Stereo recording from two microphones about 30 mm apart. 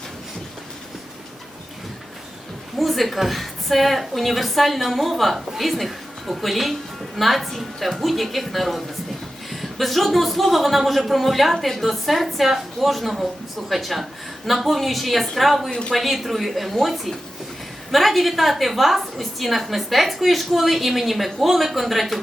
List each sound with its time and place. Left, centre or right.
2.7 s a woman's voice: centre